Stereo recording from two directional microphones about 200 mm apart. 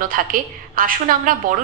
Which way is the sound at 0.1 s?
45° right (ahead or behind).